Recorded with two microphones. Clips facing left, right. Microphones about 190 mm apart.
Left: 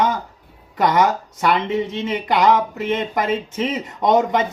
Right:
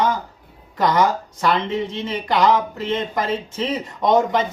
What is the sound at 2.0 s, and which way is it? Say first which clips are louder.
Speech: left 1 dB; 20° left (ahead or behind).